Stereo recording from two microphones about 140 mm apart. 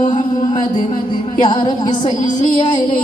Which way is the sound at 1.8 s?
65° left (ahead or behind).